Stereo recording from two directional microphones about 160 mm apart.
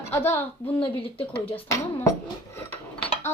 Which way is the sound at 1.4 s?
20° left (ahead or behind).